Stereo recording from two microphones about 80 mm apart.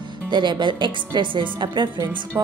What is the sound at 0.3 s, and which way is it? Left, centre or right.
A woman's voice, right.